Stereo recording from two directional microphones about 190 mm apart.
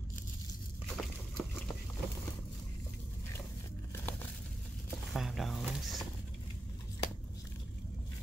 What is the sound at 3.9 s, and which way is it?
Crumpling, 10° left (ahead or behind).